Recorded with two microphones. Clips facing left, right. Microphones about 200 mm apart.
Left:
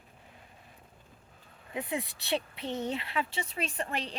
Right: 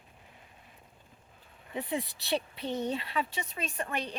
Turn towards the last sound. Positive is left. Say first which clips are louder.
# even
turn(degrees=30)  # may be behind; listen again after turning